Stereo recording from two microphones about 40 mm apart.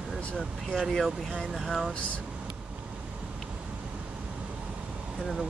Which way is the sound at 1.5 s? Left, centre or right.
Centre.